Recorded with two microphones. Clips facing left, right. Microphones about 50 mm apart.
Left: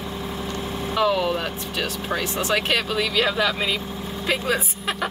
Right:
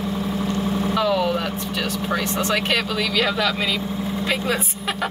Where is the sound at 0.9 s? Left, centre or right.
Centre.